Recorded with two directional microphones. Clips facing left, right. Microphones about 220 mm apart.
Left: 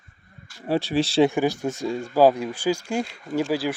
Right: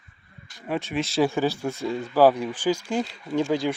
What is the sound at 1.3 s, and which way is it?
A man's voice, 15° left (ahead or behind).